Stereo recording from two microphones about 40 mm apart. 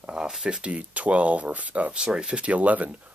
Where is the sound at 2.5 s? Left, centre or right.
Right.